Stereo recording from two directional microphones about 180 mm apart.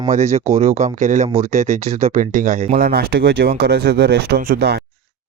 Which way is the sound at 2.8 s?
60° right (ahead or behind).